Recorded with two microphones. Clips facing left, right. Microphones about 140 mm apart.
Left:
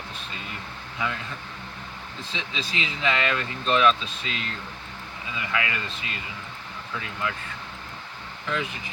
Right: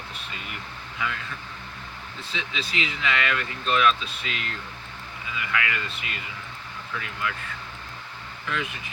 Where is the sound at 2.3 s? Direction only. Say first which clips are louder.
Right 1 dB; 30° left (ahead or behind).